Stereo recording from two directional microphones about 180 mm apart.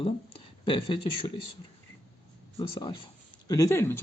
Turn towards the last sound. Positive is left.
turn(degrees=15)  # may be behind; listen again after turning